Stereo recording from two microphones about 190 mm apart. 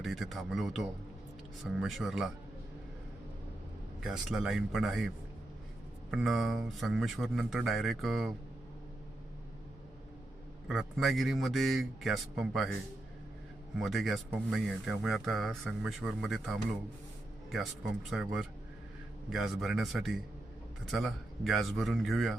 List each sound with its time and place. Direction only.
0.0 s speech: centre (ahead or behind)
4.0 s speech: 5° right (ahead or behind)
10.7 s speech: centre (ahead or behind)
13.7 s speech: centre (ahead or behind)
18.1 s speech: centre (ahead or behind)